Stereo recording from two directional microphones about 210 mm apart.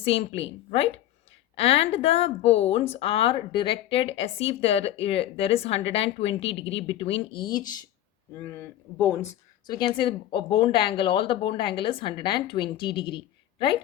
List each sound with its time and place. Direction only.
0.0 s speech: 25° left (ahead or behind)
1.5 s speech: 30° left (ahead or behind)
8.4 s speech: 10° left (ahead or behind)
9.6 s speech: 20° left (ahead or behind)